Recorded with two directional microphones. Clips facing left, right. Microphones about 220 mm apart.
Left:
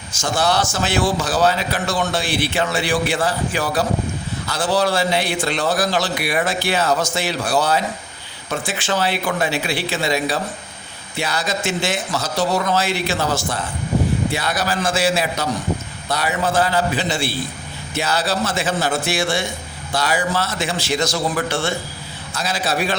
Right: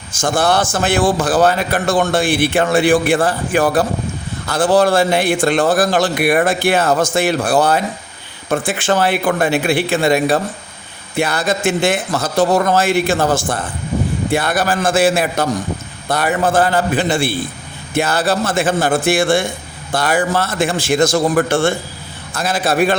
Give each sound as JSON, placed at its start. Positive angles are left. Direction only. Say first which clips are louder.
{"t": 0.1, "sound": "a man's voice", "louder": "right 4 dB", "side_deg": -50}